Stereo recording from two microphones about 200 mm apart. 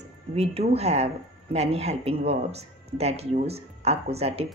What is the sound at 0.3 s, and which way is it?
A woman's voice, 30° right (ahead or behind).